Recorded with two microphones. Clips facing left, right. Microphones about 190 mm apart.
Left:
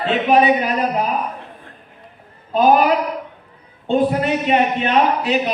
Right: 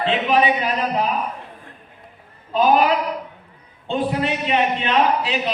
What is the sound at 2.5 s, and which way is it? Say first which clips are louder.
A man's voice: left 2 dB; 45° left (ahead or behind).